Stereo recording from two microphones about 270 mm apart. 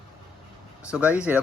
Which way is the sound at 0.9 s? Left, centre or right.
Centre.